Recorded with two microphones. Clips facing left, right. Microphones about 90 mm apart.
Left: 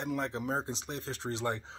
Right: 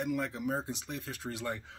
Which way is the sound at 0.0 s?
25° left (ahead or behind).